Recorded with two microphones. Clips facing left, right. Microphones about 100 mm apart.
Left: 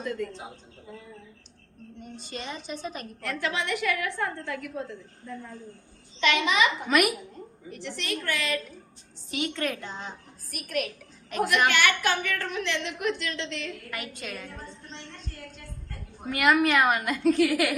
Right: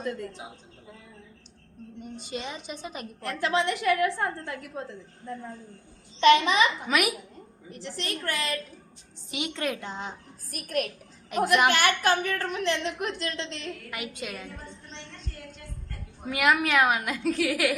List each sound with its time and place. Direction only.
2.3 s a woman's voice: 15° right (ahead or behind)
3.2 s a woman's voice: 30° right (ahead or behind)
6.1 s a woman's voice: 35° right (ahead or behind)
6.8 s a woman's voice: centre (ahead or behind)
7.8 s a woman's voice: 35° right (ahead or behind)
9.3 s a woman's voice: 15° right (ahead or behind)
10.5 s a woman's voice: 40° right (ahead or behind)
13.9 s a woman's voice: 15° right (ahead or behind)
16.2 s a woman's voice: centre (ahead or behind)